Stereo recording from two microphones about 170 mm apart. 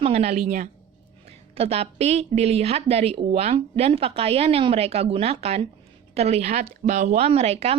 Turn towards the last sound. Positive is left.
turn(degrees=-35)  # may be behind; listen again after turning